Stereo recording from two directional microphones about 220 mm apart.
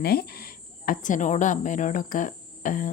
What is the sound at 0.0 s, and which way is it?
Speech, 45° left (ahead or behind).